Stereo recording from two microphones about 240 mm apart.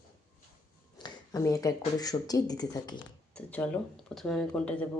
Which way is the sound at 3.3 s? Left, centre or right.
Centre.